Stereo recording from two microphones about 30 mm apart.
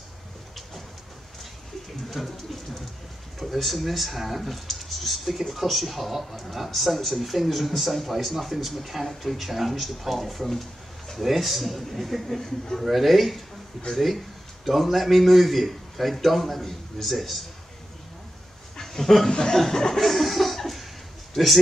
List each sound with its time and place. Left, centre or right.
2.2 s speech: centre
3.3 s speech: centre
18.8 s a sound: centre
19.2 s chuckle: left
19.5 s chuckle: centre
20.0 s laughter: centre